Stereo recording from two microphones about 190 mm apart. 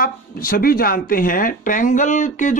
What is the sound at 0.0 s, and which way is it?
Speech, 50° left (ahead or behind).